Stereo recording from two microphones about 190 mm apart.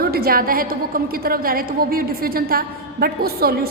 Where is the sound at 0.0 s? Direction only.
55° right (ahead or behind).